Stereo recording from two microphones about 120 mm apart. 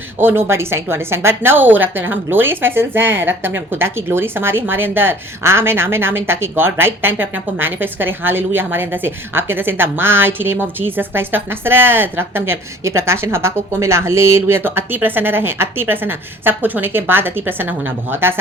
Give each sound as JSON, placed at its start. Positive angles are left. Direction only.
{"t": 0.2, "sound": "a woman's voice", "side_deg": -20}